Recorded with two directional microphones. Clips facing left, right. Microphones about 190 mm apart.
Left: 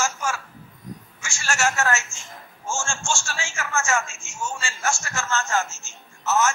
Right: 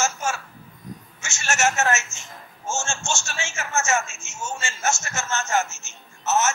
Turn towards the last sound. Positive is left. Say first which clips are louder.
# even
turn(degrees=-20)  # may be behind; listen again after turning